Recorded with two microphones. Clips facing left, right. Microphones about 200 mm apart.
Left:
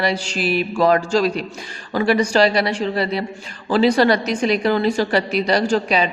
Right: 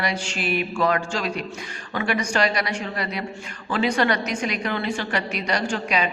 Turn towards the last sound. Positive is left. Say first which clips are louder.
# left 6 dB
turn(degrees=30)  # may be behind; listen again after turning